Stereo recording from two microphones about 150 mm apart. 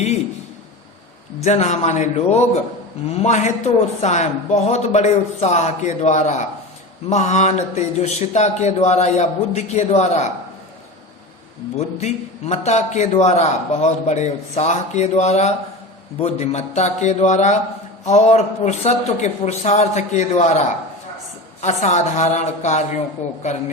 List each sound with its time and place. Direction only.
1.4 s a man's voice: 50° left (ahead or behind)
11.9 s a man's voice: 50° left (ahead or behind)